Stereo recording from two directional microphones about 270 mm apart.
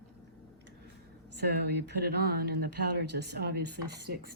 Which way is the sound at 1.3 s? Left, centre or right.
Right.